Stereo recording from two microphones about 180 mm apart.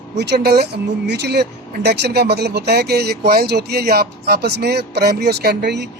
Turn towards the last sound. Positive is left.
turn(degrees=-70)  # may be behind; listen again after turning